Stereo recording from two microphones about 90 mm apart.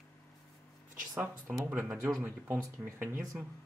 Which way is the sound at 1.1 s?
20° right (ahead or behind).